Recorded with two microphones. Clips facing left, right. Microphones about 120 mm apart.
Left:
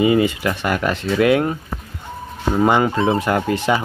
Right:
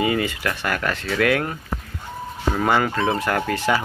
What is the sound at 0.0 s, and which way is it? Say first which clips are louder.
Speech: left 6 dB; 20° left (ahead or behind).